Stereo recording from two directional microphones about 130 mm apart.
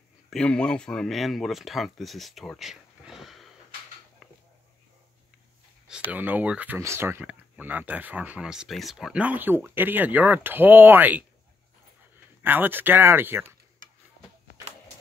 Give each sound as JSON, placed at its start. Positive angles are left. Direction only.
{"t": 0.3, "sound": "speech", "side_deg": 10}
{"t": 6.1, "sound": "speech", "side_deg": -15}
{"t": 12.4, "sound": "speech", "side_deg": -15}